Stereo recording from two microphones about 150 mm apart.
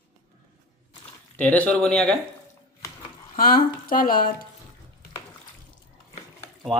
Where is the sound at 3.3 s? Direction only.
75° left (ahead or behind).